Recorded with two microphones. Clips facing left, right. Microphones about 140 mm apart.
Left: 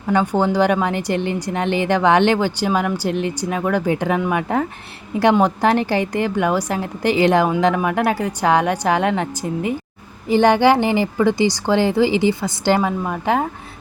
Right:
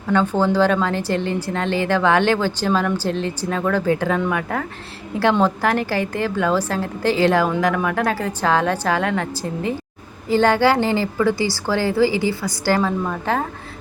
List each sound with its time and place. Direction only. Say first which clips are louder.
0.1 s a woman's voice: even; 15° left (ahead or behind)